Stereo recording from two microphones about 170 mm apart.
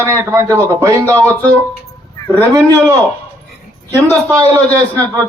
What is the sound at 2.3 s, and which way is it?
Speech, 15° right (ahead or behind).